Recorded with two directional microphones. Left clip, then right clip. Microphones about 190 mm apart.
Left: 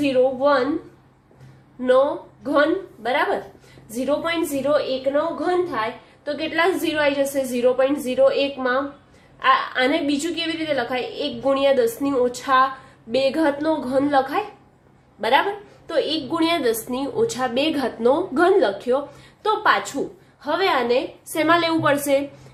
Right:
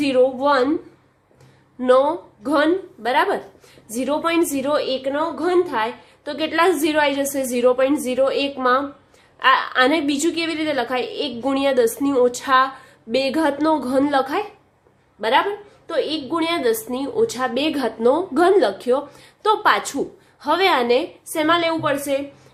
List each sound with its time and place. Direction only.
0.0 s a woman's voice: 40° right (ahead or behind)
1.8 s a woman's voice: 40° right (ahead or behind)
15.2 s a woman's voice: 20° right (ahead or behind); by 21.0 s 35° right (ahead or behind)
21.2 s a woman's voice: 10° right (ahead or behind)